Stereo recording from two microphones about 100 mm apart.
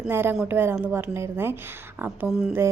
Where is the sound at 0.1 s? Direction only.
25° right (ahead or behind).